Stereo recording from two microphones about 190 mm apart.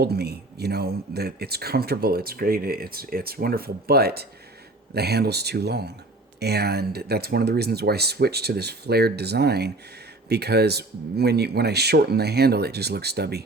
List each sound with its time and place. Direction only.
0.0 s speech: 55° right (ahead or behind)